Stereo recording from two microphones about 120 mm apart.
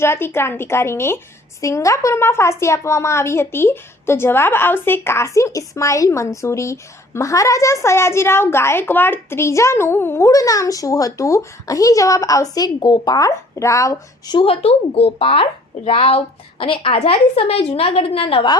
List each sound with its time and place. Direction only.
0.0 s a woman's voice: 20° left (ahead or behind)
14.3 s speech: 55° left (ahead or behind)